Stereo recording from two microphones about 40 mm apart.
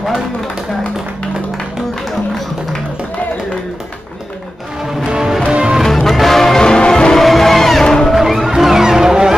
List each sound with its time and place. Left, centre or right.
4.8 s music: centre
5.9 s music: centre
6.6 s music: left
7.2 s music: centre
8.1 s music: centre